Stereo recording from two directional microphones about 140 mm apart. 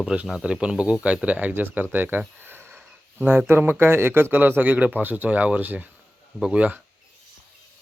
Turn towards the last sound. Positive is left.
turn(degrees=-10)  # may be behind; listen again after turning